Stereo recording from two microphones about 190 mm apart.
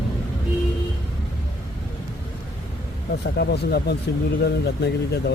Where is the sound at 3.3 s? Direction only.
60° left (ahead or behind).